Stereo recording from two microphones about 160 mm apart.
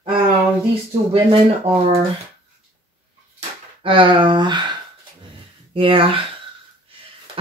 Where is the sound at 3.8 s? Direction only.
30° right (ahead or behind).